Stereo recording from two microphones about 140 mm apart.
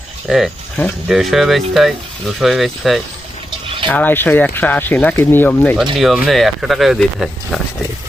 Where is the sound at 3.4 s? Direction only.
35° right (ahead or behind).